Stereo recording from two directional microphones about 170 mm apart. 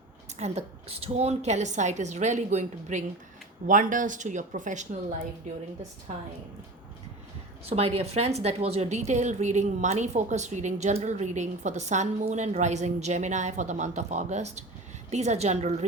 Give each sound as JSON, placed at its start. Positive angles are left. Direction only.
{"t": 0.3, "sound": "a woman's voice", "side_deg": -40}
{"t": 7.6, "sound": "a woman's voice", "side_deg": -35}